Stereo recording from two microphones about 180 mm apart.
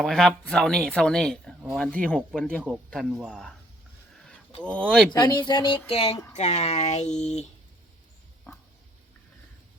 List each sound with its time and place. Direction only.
0.0 s speech: 5° left (ahead or behind)
4.6 s speech: 5° left (ahead or behind)
5.1 s a sound: 25° left (ahead or behind)
6.3 s speech: 40° left (ahead or behind)